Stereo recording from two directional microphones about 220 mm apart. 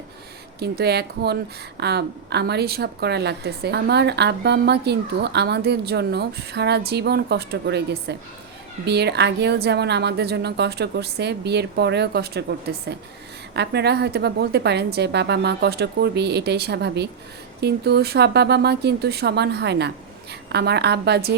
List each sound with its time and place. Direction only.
0.6 s a woman's voice: 45° right (ahead or behind)